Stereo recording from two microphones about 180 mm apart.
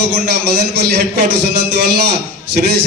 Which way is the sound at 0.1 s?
65° right (ahead or behind).